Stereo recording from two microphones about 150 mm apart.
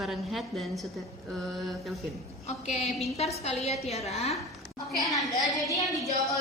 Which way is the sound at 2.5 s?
45° left (ahead or behind).